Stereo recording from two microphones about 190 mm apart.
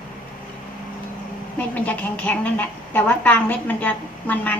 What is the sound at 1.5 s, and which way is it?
A woman's voice, 10° left (ahead or behind).